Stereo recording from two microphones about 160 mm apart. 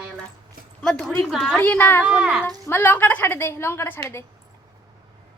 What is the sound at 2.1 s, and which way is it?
Speech, 5° right (ahead or behind).